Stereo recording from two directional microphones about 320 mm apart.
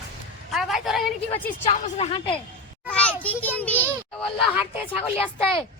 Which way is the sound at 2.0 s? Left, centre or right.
Centre.